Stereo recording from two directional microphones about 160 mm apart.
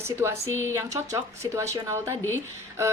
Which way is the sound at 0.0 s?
15° right (ahead or behind).